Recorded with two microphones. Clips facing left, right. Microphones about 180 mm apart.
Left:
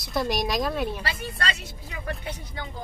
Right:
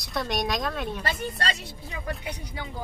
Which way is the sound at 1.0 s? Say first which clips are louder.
Right 2 dB; 40° right (ahead or behind).